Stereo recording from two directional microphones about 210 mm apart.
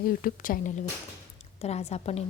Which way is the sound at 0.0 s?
45° left (ahead or behind).